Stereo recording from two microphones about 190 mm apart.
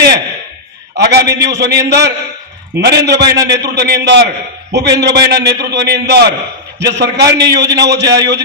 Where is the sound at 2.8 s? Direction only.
60° right (ahead or behind).